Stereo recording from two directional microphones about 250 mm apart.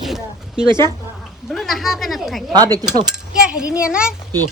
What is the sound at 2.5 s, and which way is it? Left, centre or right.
Speech, centre.